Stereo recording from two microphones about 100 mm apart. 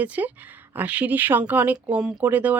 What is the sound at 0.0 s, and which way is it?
A woman's voice, 15° right (ahead or behind).